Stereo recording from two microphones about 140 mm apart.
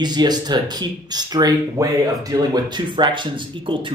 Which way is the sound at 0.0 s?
30° right (ahead or behind).